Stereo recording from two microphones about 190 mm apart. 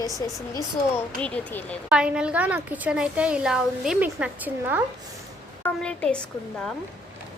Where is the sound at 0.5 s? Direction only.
10° left (ahead or behind).